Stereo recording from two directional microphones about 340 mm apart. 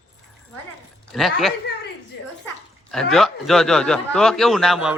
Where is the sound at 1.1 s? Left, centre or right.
Centre.